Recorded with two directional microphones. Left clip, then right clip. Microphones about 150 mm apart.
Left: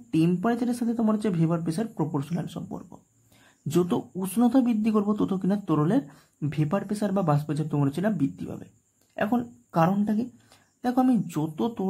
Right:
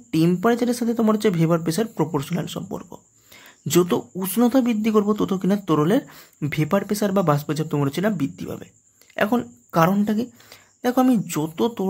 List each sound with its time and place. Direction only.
0.1 s speech: 20° right (ahead or behind)